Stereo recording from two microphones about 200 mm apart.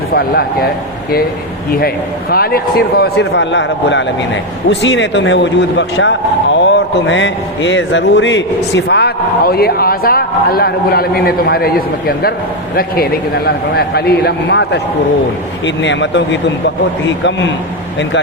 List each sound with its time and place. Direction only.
0.1 s a man's voice: 50° left (ahead or behind)
2.3 s a man's voice: 50° left (ahead or behind)